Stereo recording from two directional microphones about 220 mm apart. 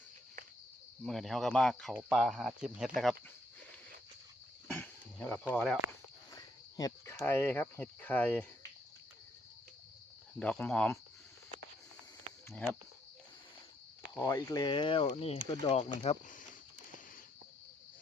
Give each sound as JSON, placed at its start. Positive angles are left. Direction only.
{"t": 1.0, "sound": "speech", "side_deg": 0}
{"t": 4.7, "sound": "a sound", "side_deg": 10}
{"t": 6.3, "sound": "speech", "side_deg": 15}
{"t": 10.4, "sound": "speech", "side_deg": 5}
{"t": 14.2, "sound": "speech", "side_deg": 15}
{"t": 16.0, "sound": "speech", "side_deg": 35}